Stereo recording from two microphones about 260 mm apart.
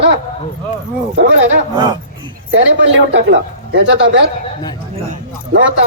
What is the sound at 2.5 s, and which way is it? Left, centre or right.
Speech, right.